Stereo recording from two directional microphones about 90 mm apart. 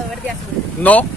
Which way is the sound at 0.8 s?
15° left (ahead or behind).